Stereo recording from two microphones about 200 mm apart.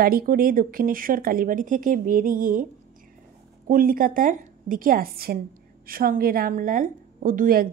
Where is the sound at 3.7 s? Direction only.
45° right (ahead or behind).